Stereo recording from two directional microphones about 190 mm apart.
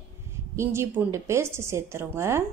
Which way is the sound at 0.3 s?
15° right (ahead or behind).